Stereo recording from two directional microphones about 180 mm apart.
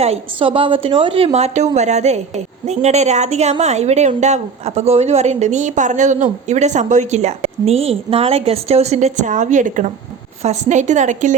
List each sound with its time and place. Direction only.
0.0 s a woman's voice: 30° right (ahead or behind)